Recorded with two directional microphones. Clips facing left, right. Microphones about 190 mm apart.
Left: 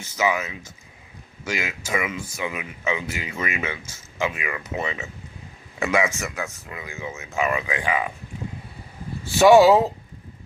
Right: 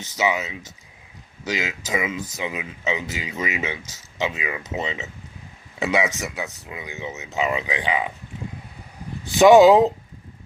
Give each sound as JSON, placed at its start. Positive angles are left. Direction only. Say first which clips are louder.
{"t": 0.2, "sound": "speech", "louder": "even", "side_deg": -20}
{"t": 9.2, "sound": "speech", "louder": "right 2 dB", "side_deg": -20}